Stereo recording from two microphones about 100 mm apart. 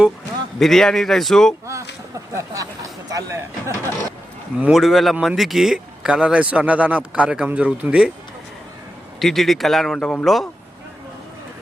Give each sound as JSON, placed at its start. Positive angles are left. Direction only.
{"t": 0.6, "sound": "a man's voice", "side_deg": 5}
{"t": 1.6, "sound": "speech", "side_deg": -30}
{"t": 4.7, "sound": "a man's voice", "side_deg": 0}
{"t": 9.1, "sound": "a man's voice", "side_deg": 0}